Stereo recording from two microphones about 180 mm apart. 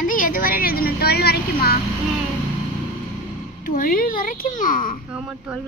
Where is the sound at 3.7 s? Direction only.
50° left (ahead or behind).